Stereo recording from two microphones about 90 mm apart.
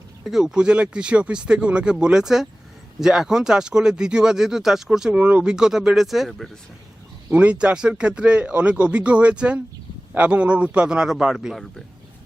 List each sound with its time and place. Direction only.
0.3 s speech: 5° right (ahead or behind)
7.3 s speech: 15° right (ahead or behind)